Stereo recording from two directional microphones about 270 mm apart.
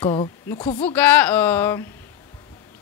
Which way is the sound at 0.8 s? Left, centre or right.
Centre.